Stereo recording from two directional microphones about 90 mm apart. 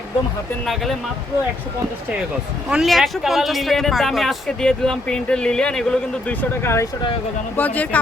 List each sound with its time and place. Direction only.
2.6 s a man's voice: 5° right (ahead or behind)
6.4 s speech: 25° left (ahead or behind)